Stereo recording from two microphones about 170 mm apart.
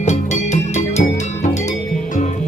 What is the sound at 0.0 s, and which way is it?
Music, 45° left (ahead or behind).